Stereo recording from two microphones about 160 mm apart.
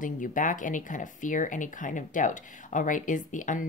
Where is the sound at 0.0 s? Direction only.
55° left (ahead or behind).